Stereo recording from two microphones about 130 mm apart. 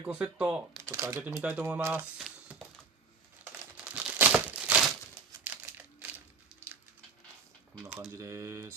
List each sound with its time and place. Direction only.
0.0 s speech: 10° right (ahead or behind)
0.8 s speech: 20° right (ahead or behind)
2.1 s a sound: centre (ahead or behind)
3.4 s crumpling: 10° right (ahead or behind)
6.5 s a sound: 5° right (ahead or behind)
8.2 s speech: 20° right (ahead or behind)